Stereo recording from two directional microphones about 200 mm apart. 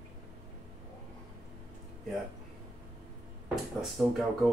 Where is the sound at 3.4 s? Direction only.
Centre (ahead or behind).